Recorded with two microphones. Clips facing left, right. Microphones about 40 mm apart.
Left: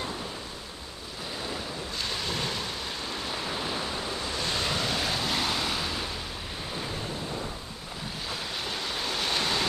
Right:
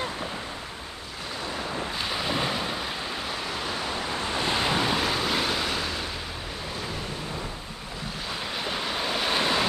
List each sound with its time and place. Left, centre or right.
2.0 s ocean: centre
4.2 s waves: right
5.0 s waves: centre
8.5 s waves: centre